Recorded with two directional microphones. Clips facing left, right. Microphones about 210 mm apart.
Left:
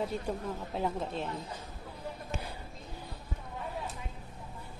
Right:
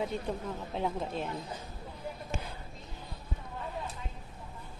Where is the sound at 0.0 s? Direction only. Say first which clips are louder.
Even; centre (ahead or behind).